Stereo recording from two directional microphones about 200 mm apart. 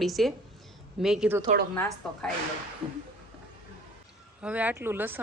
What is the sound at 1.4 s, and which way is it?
Speech, 45° right (ahead or behind).